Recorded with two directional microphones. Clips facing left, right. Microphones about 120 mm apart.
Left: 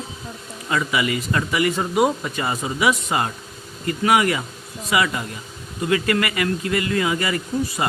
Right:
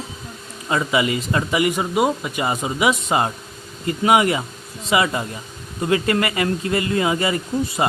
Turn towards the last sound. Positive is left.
turn(degrees=-25)  # may be behind; listen again after turning